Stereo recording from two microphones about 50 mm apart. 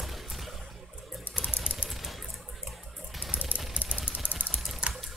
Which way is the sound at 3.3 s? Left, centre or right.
Right.